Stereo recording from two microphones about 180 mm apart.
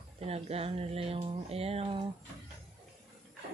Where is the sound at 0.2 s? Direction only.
35° right (ahead or behind).